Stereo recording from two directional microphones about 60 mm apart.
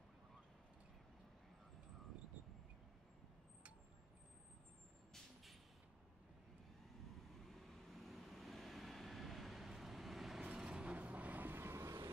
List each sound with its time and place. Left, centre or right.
5.1 s a sound: centre
7.4 s vehicle: centre
10.4 s vehicle: centre; by 12.1 s right